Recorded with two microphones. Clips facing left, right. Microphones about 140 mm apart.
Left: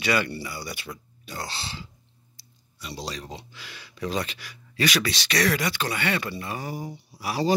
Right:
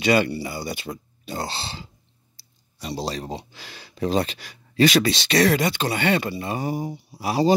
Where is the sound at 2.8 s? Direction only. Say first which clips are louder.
Right 7 dB; 35° right (ahead or behind).